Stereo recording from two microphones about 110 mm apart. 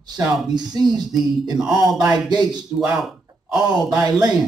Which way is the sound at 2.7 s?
15° right (ahead or behind).